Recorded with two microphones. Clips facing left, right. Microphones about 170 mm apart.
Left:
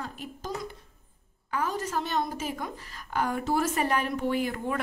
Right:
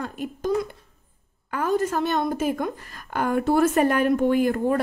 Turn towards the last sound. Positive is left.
turn(degrees=-45)  # may be behind; listen again after turning